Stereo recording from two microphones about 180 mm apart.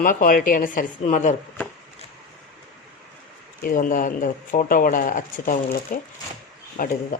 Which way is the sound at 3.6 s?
50° left (ahead or behind).